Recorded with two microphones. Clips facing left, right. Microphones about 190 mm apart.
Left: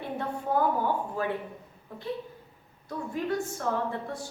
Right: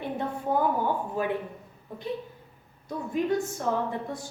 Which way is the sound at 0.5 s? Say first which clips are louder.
Even; 15° right (ahead or behind).